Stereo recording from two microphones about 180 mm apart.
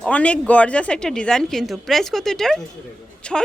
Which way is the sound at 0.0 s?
5° left (ahead or behind).